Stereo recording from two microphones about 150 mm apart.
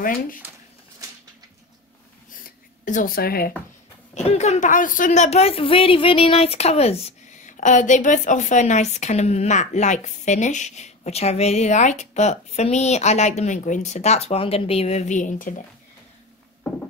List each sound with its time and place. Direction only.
0.0 s speech: 65° left (ahead or behind)
2.4 s a sound: 60° left (ahead or behind); by 3.5 s 85° left
4.1 s speech: 45° left (ahead or behind)